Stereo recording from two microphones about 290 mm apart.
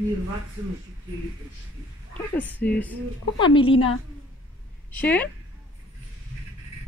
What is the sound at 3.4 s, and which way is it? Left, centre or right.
Speech, centre.